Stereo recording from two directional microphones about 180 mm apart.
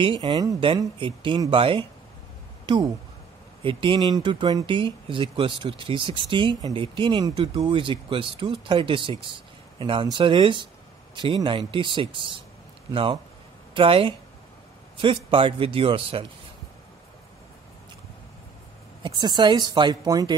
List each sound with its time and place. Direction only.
0.0 s speech: 25° right (ahead or behind)
19.0 s speech: 25° right (ahead or behind)